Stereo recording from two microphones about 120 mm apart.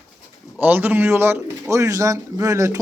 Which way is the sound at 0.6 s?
15° right (ahead or behind).